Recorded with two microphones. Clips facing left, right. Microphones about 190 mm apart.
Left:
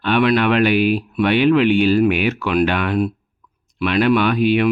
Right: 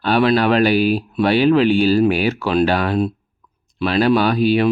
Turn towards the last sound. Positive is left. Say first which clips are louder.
# even
turn(degrees=-35)  # may be behind; listen again after turning